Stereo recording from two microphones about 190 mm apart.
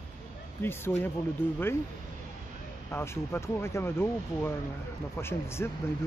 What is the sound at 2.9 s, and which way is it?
Speech, 15° left (ahead or behind).